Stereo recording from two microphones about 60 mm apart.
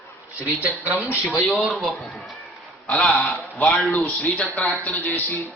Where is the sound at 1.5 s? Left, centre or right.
Centre.